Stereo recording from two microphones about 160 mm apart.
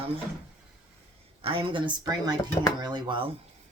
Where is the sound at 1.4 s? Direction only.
35° right (ahead or behind).